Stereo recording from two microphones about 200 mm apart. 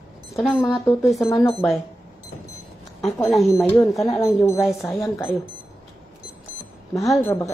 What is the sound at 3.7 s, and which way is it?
Speech, 10° left (ahead or behind).